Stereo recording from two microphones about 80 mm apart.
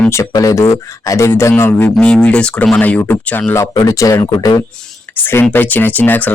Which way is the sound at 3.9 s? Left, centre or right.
Left.